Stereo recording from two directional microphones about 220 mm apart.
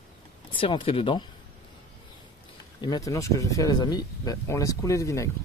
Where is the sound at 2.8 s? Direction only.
15° left (ahead or behind).